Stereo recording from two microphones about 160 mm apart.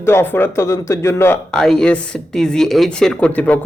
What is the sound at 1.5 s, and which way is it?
A man's voice, 5° left (ahead or behind).